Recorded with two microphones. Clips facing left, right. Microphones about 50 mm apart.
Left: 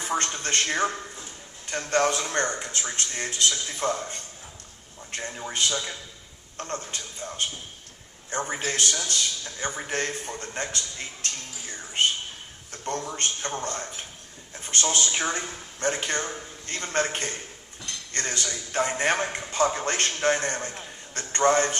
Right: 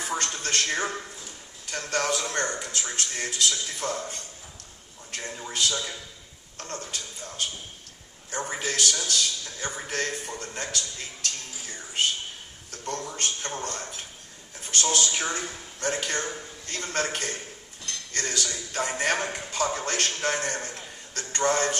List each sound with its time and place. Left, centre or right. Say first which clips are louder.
0.0 s music: left 2 dB; left
0.3 s a man's voice: left 1 dB; left
12.7 s a man's voice: left 2 dB; left
14.7 s a man's voice: even; left